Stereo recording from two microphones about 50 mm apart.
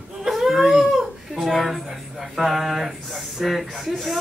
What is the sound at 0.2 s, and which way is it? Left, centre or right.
Speech, centre.